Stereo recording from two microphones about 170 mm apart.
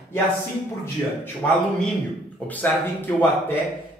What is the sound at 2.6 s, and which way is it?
Speech, 10° left (ahead or behind).